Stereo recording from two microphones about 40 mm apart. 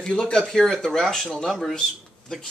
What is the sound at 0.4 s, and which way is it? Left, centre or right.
Speech, centre.